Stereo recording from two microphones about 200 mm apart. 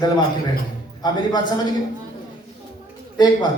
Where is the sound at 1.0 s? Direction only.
20° left (ahead or behind).